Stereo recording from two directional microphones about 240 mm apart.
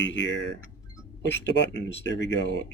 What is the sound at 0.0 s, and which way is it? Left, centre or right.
Speech, left.